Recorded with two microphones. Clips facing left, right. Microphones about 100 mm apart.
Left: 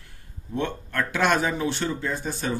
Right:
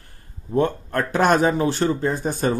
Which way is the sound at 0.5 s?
40° right (ahead or behind).